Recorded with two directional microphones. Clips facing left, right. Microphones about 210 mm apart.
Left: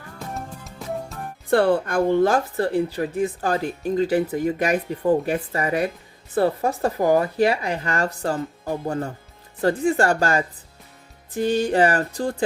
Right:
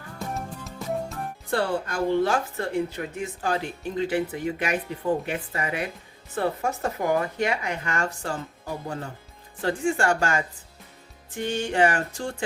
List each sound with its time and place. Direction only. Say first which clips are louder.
1.5 s speech: left 8 dB; 55° left (ahead or behind); by 12.3 s 35° left (ahead or behind)